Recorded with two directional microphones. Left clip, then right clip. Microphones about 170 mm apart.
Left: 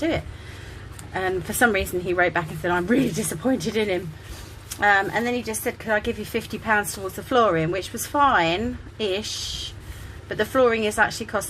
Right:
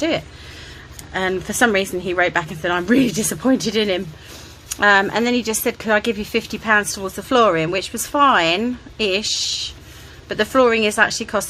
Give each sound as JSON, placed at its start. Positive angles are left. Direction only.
{"t": 1.1, "sound": "a woman's voice", "side_deg": -20}